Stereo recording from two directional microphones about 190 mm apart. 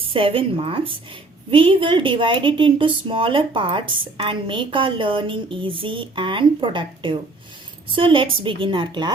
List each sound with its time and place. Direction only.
0.0 s a woman's voice: 30° right (ahead or behind)